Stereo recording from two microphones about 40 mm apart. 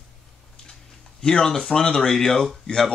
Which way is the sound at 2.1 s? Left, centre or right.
Centre.